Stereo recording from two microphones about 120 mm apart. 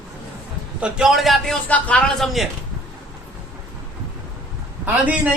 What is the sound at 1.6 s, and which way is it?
Speech, 10° left (ahead or behind).